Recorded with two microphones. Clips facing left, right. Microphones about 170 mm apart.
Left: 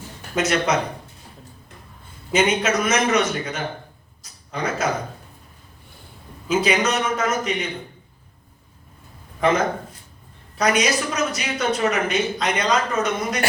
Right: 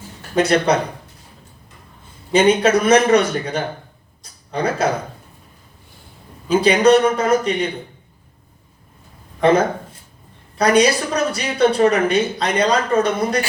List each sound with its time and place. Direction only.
0.3 s a woman's voice: 35° right (ahead or behind)
2.3 s a woman's voice: 35° right (ahead or behind)
4.2 s a sound: 30° right (ahead or behind)
6.5 s a woman's voice: 35° right (ahead or behind)
10.6 s a woman's voice: 35° right (ahead or behind)